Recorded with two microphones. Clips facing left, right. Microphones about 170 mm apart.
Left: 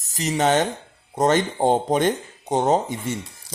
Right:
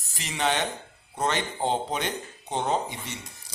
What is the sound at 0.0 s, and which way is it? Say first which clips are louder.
Speech: left 7 dB; 40° left (ahead or behind).